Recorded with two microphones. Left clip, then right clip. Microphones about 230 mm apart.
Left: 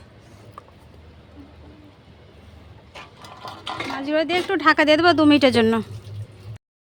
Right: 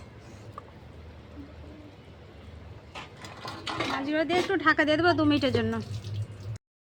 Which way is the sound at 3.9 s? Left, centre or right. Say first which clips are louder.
Left 6 dB; left.